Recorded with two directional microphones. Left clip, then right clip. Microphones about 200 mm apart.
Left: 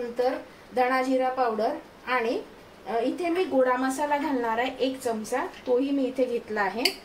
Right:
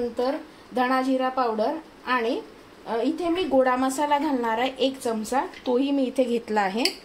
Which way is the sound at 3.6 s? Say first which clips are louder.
Right 2 dB; 40° right (ahead or behind).